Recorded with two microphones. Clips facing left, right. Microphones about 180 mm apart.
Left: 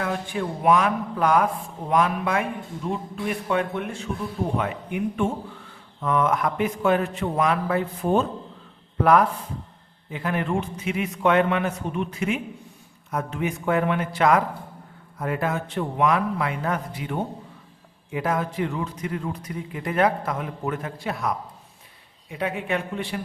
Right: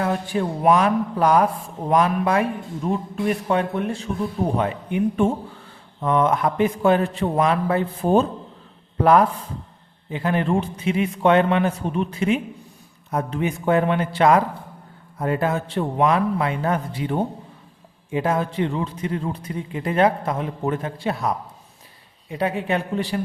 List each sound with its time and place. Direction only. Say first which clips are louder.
0.0 s a man's voice: right 4 dB; 35° right (ahead or behind)